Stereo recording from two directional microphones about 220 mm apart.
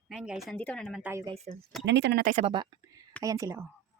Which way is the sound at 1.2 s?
25° right (ahead or behind).